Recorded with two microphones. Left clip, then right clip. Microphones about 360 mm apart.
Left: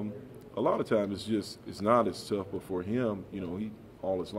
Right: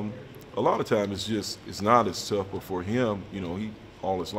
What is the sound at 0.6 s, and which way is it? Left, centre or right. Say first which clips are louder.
Speech: right 4 dB; left.